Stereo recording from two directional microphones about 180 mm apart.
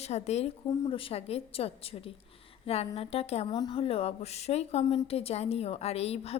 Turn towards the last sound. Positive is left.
turn(degrees=35)  # may be behind; listen again after turning